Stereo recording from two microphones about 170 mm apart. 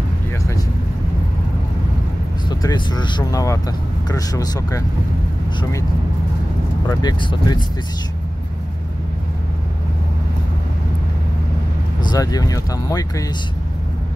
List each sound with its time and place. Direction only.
2.6 s speech: 25° left (ahead or behind)
6.9 s speech: 25° left (ahead or behind)
12.0 s speech: 25° left (ahead or behind)